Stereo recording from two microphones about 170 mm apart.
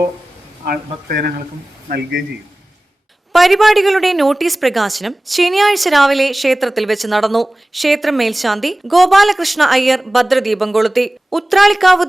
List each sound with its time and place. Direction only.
0.6 s speech: 60° right (ahead or behind)
3.3 s a woman's voice: centre (ahead or behind)